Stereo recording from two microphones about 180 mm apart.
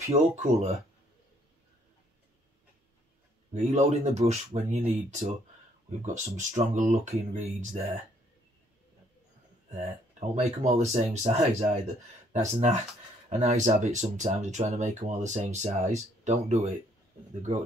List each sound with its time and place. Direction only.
0.4 s speech: 35° right (ahead or behind)
3.5 s speech: 40° right (ahead or behind)
10.3 s speech: 35° right (ahead or behind)